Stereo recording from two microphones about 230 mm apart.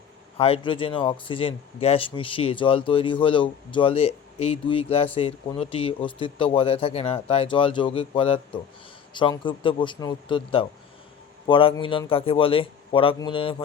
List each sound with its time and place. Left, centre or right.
0.3 s speech: left